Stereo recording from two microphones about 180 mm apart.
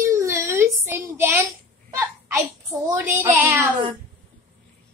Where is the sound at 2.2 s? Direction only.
15° right (ahead or behind).